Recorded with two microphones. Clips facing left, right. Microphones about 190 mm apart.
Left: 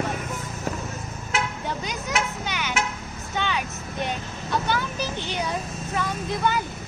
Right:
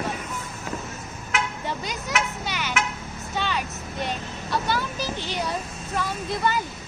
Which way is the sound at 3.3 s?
5° right (ahead or behind).